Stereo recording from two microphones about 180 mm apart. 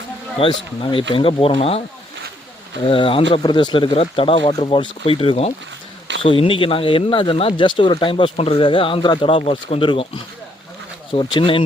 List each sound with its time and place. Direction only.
0.3 s speech: 30° left (ahead or behind)
2.8 s speech: 30° left (ahead or behind)
11.1 s speech: 25° left (ahead or behind)